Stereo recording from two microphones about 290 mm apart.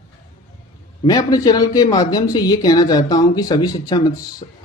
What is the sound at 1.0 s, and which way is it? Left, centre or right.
Speech, centre.